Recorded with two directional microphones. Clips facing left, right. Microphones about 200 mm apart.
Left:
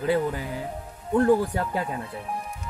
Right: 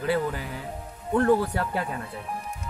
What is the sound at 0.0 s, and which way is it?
Speech, 20° left (ahead or behind).